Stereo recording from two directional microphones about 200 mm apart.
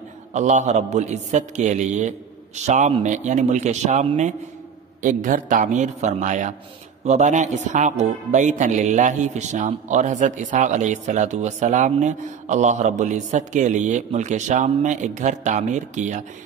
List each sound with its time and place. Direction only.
0.3 s speech: 35° right (ahead or behind)